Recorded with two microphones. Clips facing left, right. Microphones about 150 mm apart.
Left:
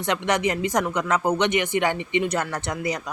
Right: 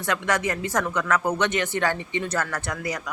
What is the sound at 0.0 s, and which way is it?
Speech, 20° left (ahead or behind).